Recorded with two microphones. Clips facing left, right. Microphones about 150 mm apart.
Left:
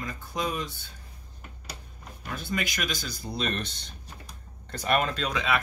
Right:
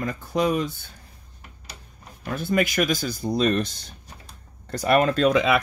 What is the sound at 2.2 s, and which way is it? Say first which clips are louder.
Speech: right 9 dB; 55° right (ahead or behind).